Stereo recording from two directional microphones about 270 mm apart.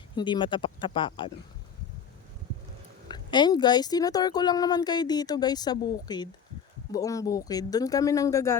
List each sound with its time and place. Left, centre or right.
0.2 s speech: centre
3.1 s speech: centre